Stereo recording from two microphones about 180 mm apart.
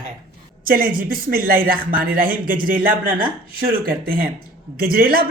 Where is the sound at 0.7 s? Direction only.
50° right (ahead or behind).